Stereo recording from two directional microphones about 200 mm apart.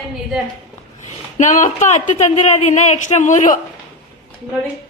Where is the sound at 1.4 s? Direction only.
40° left (ahead or behind).